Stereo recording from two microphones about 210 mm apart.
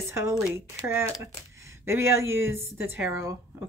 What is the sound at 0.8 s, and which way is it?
A woman's voice, 10° right (ahead or behind).